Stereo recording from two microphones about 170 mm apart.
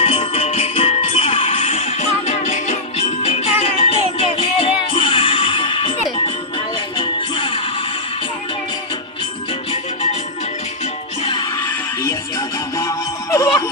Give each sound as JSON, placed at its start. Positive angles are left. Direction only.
{"t": 0.0, "sound": "music", "side_deg": 35}
{"t": 11.2, "sound": "music", "side_deg": 30}
{"t": 12.7, "sound": "music", "side_deg": 20}